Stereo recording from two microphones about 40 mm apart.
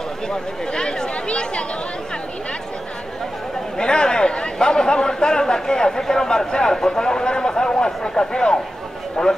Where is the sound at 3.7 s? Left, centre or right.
Left.